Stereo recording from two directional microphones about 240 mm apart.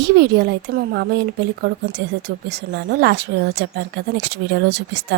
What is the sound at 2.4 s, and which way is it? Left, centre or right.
Speech, right.